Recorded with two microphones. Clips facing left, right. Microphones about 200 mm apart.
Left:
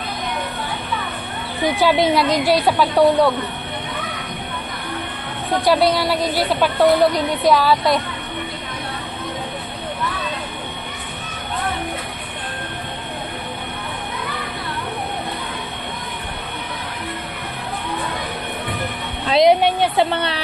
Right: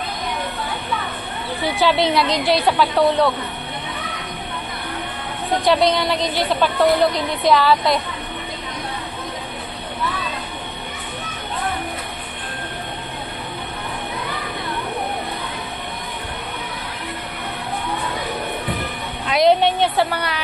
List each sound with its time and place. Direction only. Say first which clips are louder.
1.6 s a woman's voice: left 2 dB; 15° left (ahead or behind)
5.7 s a woman's voice: left 1 dB; 5° left (ahead or behind)
19.4 s a sound: even; 15° left (ahead or behind)
20.1 s a woman's voice: left 3 dB; 25° left (ahead or behind)